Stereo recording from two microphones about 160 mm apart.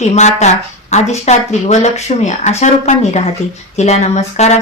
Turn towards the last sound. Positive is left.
turn(degrees=45)  # may be behind; listen again after turning